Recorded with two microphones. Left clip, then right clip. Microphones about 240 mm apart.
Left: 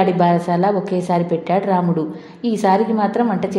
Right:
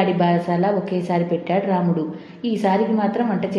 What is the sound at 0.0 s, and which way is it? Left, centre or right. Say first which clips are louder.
A woman's voice: left 4 dB; left.